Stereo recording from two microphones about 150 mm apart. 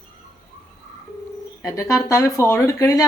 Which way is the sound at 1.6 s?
20° left (ahead or behind).